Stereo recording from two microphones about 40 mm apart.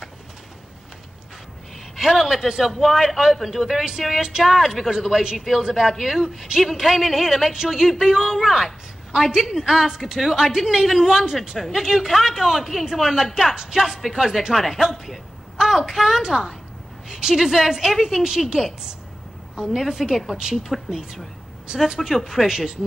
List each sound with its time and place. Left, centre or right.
2.0 s a man's voice: centre
6.6 s a man's voice: centre
7.5 s speech: centre
7.8 s a woman's voice: centre
19.7 s a man's voice: centre
21.7 s speech: centre